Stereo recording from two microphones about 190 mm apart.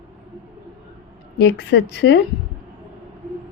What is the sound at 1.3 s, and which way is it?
Speech, 60° left (ahead or behind).